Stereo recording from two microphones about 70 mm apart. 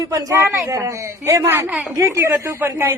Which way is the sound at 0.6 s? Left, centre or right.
Right.